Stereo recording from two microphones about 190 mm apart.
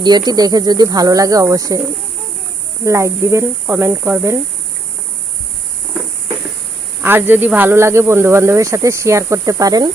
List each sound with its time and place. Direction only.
0.0 s speech: 20° right (ahead or behind)
2.8 s speech: 15° right (ahead or behind)
7.0 s speech: 10° right (ahead or behind)